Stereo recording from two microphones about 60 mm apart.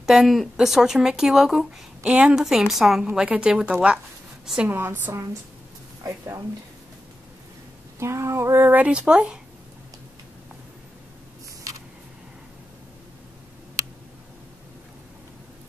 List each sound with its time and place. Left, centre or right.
0.0 s speech: centre
3.2 s speech: centre
4.6 s a woman's voice: right
6.0 s speech: right
8.0 s female singing: right
8.6 s speech: right